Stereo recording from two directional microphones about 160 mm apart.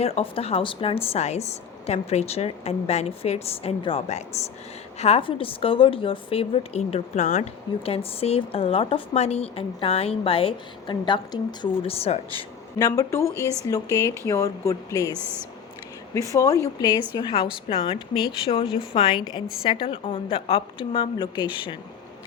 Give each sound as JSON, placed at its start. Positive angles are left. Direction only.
{"t": 0.0, "sound": "speech", "side_deg": 35}
{"t": 12.8, "sound": "speech", "side_deg": 20}
{"t": 13.3, "sound": "speech", "side_deg": -15}
{"t": 13.7, "sound": "speech", "side_deg": 20}
{"t": 15.1, "sound": "speech", "side_deg": -15}
{"t": 16.1, "sound": "speech", "side_deg": 20}